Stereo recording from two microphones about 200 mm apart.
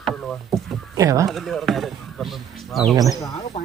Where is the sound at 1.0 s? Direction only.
15° right (ahead or behind).